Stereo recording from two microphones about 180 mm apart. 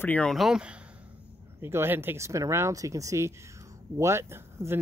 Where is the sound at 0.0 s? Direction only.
5° left (ahead or behind).